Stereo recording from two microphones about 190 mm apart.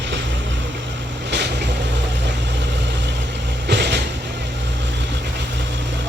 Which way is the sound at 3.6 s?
65° right (ahead or behind).